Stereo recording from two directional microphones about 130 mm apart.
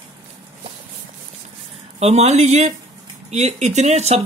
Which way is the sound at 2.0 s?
55° right (ahead or behind).